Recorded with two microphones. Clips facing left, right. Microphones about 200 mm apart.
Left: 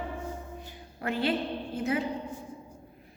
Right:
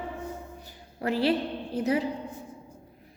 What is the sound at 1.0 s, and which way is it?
Speech, 35° right (ahead or behind).